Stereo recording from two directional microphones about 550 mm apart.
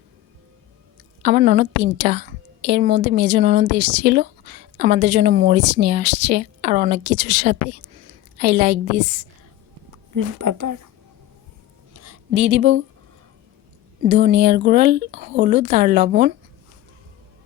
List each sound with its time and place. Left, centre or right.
1.2 s a woman's voice: centre
9.9 s speech: right
11.9 s a sound: right
14.0 s a woman's voice: centre